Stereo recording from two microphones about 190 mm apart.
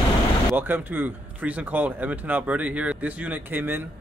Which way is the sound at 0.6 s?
10° right (ahead or behind).